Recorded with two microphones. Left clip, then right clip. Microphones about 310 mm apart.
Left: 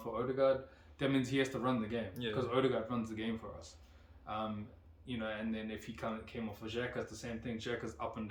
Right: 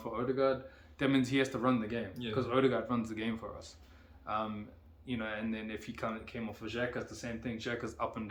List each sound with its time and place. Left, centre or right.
0.0 s speech: centre